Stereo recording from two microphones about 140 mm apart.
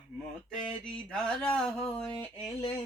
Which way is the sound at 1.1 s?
5° left (ahead or behind).